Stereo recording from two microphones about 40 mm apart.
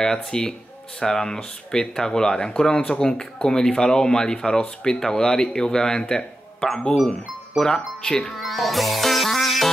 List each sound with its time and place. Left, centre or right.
0.0 s speech: centre
8.4 s music: centre